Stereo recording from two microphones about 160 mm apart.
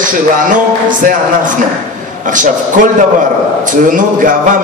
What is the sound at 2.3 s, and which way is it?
A man's voice, 55° right (ahead or behind).